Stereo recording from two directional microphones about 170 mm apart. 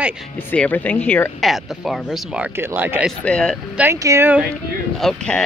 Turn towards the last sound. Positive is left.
turn(degrees=5)  # may be behind; listen again after turning